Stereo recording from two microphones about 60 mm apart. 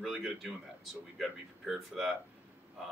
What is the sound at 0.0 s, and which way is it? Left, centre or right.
Speech, centre.